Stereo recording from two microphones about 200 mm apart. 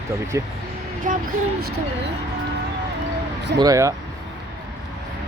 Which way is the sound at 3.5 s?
20° right (ahead or behind).